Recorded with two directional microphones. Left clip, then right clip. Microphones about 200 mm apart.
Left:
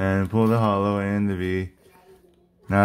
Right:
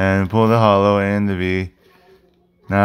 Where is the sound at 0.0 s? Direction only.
25° right (ahead or behind).